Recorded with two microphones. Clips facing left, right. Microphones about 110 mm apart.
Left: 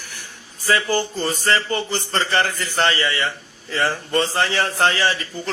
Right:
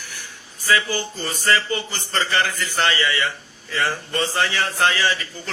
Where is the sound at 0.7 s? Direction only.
40° left (ahead or behind).